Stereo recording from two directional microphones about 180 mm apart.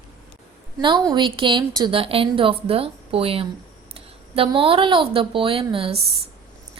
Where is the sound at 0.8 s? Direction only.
25° right (ahead or behind).